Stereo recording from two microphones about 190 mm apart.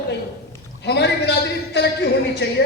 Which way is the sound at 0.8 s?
65° left (ahead or behind).